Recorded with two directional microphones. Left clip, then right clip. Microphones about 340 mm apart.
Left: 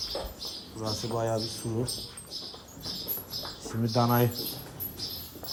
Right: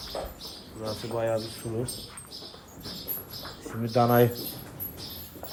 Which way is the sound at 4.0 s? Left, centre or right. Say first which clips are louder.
Right 5 dB; centre.